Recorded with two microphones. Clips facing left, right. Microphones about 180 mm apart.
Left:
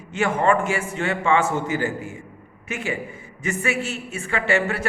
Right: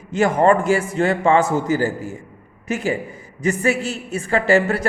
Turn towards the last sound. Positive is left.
turn(degrees=-35)  # may be behind; listen again after turning